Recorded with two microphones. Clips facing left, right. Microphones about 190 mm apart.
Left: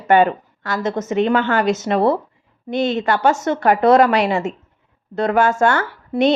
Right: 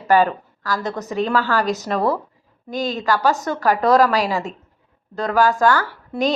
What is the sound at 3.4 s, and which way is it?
Speech, 25° left (ahead or behind).